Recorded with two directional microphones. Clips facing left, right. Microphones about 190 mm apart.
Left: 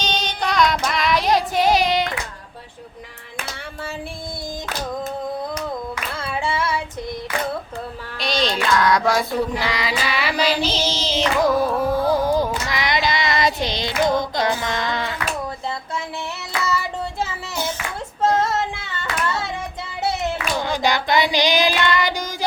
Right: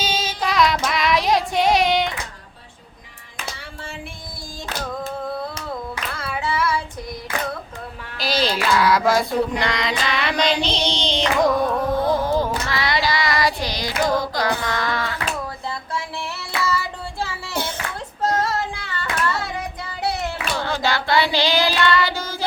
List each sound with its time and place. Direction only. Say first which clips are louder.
0.0 s child singing: even; 5° right (ahead or behind)
6.1 s singing: even; 25° left (ahead or behind)
8.2 s female singing: even; 5° right (ahead or behind)
12.6 s child singing: even; 15° left (ahead or behind)
16.6 s child singing: left 2 dB; 20° left (ahead or behind)